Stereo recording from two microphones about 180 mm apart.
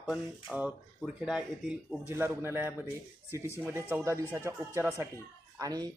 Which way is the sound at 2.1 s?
15° right (ahead or behind).